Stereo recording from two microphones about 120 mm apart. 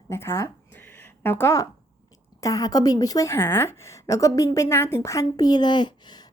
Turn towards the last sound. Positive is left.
turn(degrees=40)  # may be behind; listen again after turning